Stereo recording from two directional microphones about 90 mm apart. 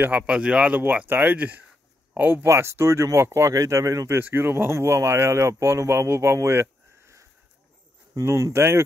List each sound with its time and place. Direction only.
0.3 s speech: 10° right (ahead or behind); by 4.2 s 35° right (ahead or behind)
4.2 s speech: 25° right (ahead or behind)